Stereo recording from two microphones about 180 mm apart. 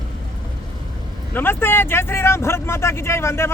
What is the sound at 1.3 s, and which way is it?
Speech, 10° left (ahead or behind).